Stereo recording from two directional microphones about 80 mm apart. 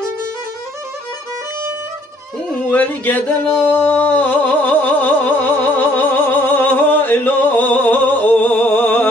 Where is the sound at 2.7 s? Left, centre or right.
Left.